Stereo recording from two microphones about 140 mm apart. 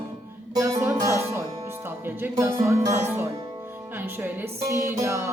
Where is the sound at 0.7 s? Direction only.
20° right (ahead or behind).